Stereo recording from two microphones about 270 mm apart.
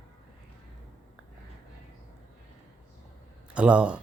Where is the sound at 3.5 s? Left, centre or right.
Centre.